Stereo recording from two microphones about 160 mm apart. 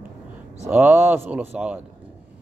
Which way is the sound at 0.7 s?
10° right (ahead or behind).